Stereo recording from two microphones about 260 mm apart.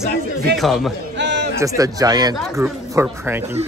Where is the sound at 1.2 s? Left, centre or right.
Right.